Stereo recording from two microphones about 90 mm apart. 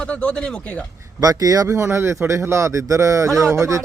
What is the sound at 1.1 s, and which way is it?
Speech, 45° right (ahead or behind).